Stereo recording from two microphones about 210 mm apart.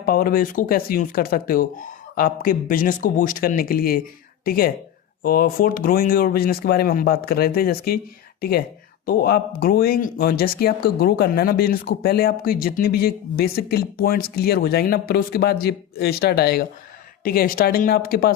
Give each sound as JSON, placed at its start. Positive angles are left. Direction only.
{"t": 0.0, "sound": "speech", "side_deg": 45}